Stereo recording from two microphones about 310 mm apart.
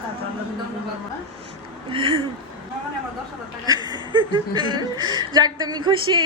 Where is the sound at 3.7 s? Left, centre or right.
Centre.